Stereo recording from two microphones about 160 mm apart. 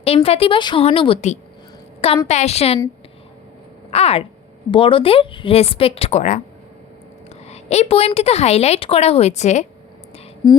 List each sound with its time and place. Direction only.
0.0 s a woman's voice: 35° left (ahead or behind)
3.9 s a woman's voice: 40° left (ahead or behind)
7.4 s a woman's voice: 45° left (ahead or behind)